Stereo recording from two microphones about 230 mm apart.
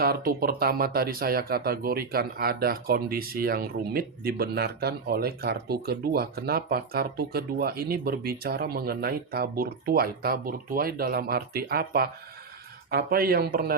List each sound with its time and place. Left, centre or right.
0.0 s speech: right